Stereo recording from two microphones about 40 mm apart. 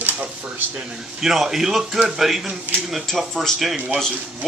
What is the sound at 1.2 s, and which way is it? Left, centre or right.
A man's voice, centre.